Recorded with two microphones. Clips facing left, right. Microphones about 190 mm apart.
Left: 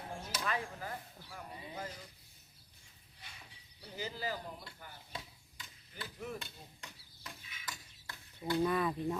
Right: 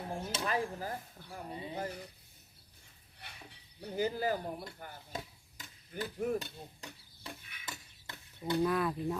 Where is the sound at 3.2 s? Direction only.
65° right (ahead or behind).